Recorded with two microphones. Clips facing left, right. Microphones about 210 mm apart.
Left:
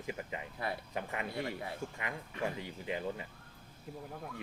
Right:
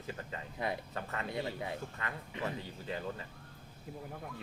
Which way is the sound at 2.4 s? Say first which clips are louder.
Left 2 dB; 15° left (ahead or behind).